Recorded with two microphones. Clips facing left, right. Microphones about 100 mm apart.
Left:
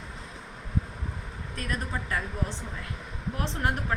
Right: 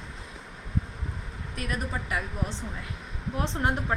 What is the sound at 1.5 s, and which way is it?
Speech, 10° right (ahead or behind).